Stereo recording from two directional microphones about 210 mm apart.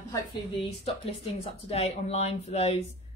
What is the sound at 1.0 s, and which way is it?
Speech, 30° left (ahead or behind).